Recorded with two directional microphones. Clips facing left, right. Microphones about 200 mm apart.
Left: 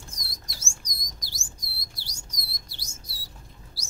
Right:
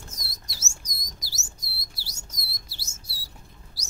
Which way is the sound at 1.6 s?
5° right (ahead or behind).